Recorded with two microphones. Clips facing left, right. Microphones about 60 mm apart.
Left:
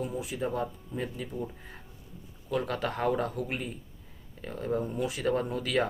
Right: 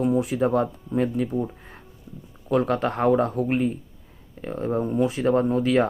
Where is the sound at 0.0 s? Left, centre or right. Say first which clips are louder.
Right 11 dB; right.